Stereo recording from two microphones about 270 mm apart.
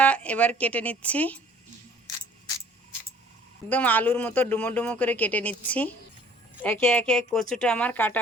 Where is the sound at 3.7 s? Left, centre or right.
Centre.